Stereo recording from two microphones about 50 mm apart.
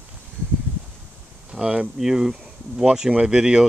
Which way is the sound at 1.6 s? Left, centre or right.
Right.